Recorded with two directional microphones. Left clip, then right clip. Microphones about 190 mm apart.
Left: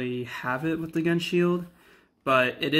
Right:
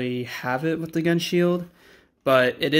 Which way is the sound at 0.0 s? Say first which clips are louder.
Right 3 dB; 35° right (ahead or behind).